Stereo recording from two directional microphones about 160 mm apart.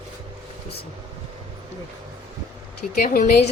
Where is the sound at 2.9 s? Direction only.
60° left (ahead or behind).